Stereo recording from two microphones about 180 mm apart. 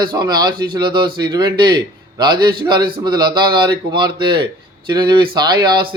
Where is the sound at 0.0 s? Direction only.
25° right (ahead or behind).